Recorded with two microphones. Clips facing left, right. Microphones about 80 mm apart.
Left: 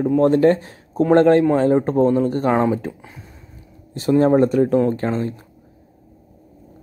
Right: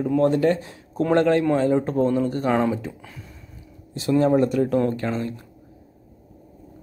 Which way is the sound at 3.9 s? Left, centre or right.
Left.